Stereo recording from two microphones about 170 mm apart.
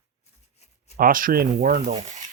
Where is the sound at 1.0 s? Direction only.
55° right (ahead or behind).